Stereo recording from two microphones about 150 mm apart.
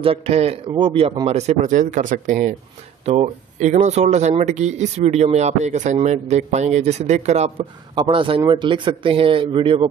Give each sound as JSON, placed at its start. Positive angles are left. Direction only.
{"t": 0.0, "sound": "speech", "side_deg": -40}
{"t": 7.9, "sound": "speech", "side_deg": -30}